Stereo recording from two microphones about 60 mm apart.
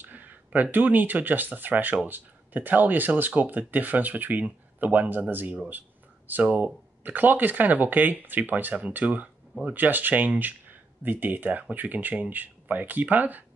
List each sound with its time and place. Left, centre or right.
0.0 s speech: right